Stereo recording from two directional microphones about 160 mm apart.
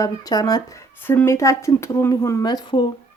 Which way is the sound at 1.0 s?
15° left (ahead or behind).